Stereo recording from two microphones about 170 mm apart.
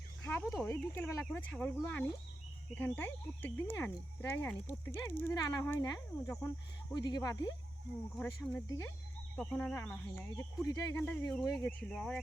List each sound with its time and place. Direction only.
0.2 s a sound: 15° left (ahead or behind)
0.5 s speech: 10° left (ahead or behind)
8.2 s speech: 10° left (ahead or behind)